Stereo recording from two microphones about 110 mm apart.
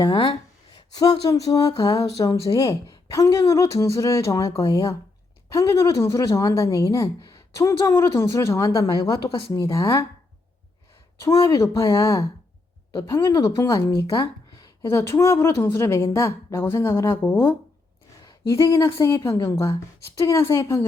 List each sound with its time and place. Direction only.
0.0 s speech: 45° left (ahead or behind)
0.8 s a sound: 35° left (ahead or behind)
2.2 s speech: 30° left (ahead or behind)
11.5 s speech: 30° left (ahead or behind)
14.6 s speech: 25° left (ahead or behind)
18.2 s a sound: 25° left (ahead or behind)
18.9 s speech: 25° left (ahead or behind)